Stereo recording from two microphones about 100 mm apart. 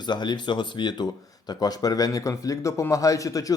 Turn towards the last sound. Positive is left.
turn(degrees=35)  # may be behind; listen again after turning